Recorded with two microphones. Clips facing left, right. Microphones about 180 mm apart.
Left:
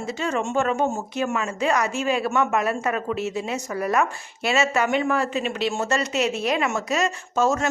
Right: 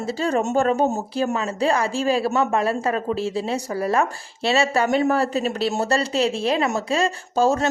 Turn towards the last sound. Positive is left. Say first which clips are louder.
# right 2 dB
turn(degrees=-30)  # may be behind; listen again after turning